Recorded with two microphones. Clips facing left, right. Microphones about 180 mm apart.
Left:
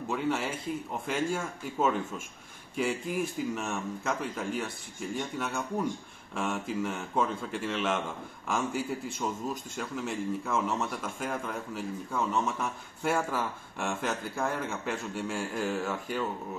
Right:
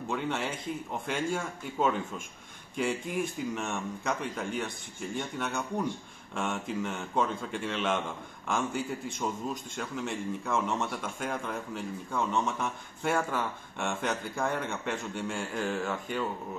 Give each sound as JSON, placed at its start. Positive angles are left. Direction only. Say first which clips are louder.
{"t": 0.1, "sound": "a man's voice", "louder": "left 2 dB", "side_deg": 5}